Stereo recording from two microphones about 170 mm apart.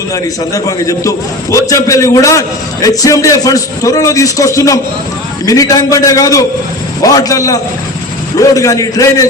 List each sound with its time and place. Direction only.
0.1 s a man's voice: 20° left (ahead or behind)